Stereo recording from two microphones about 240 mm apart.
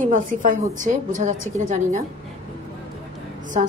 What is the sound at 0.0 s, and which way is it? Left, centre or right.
A woman's voice, right.